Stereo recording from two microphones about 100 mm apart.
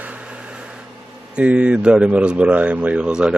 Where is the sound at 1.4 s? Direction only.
10° right (ahead or behind).